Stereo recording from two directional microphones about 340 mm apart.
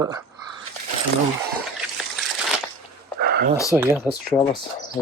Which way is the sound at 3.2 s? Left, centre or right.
Right.